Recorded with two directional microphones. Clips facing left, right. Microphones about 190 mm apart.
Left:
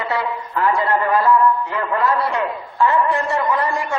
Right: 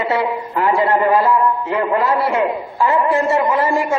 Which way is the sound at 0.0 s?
20° right (ahead or behind).